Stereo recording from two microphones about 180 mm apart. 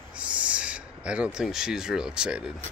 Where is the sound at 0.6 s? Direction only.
5° right (ahead or behind).